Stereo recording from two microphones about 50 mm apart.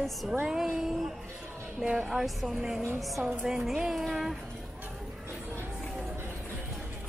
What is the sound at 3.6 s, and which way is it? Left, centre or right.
Music, centre.